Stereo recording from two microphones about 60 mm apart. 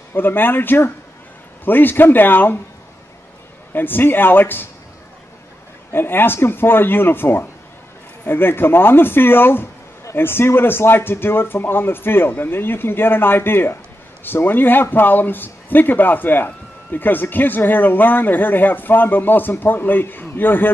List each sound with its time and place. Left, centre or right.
0.1 s speech: left
3.7 s speech: left
5.9 s speech: left